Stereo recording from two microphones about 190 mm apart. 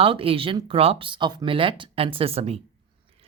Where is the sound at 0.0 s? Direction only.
30° right (ahead or behind).